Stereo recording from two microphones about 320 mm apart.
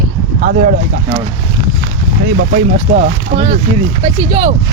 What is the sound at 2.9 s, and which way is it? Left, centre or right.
Speech, right.